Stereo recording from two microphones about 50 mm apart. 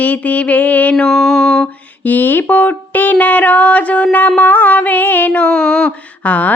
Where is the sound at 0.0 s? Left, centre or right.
Left.